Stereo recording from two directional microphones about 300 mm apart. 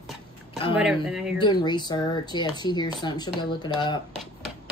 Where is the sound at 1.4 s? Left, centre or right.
Centre.